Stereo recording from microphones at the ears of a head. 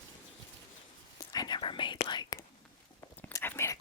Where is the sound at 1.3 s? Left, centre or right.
Left.